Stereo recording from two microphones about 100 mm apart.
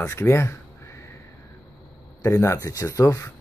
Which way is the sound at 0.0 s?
25° left (ahead or behind).